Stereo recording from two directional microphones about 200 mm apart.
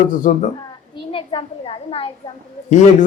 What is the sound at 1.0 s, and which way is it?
A child's voice, 25° left (ahead or behind).